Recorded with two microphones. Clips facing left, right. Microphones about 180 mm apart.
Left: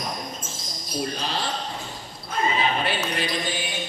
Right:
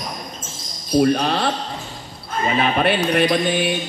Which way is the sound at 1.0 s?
60° right (ahead or behind).